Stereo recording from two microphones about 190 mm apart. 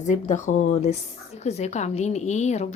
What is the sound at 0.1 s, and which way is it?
A woman's voice, 40° left (ahead or behind).